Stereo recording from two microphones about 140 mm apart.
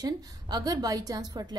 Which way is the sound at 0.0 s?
30° right (ahead or behind).